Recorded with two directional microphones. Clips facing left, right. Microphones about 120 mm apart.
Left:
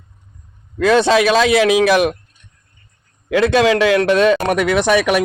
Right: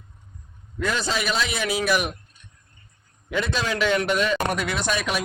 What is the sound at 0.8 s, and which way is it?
A man's voice, 80° left.